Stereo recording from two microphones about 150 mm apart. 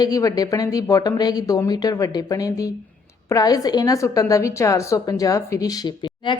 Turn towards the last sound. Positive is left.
turn(degrees=30)  # may be behind; listen again after turning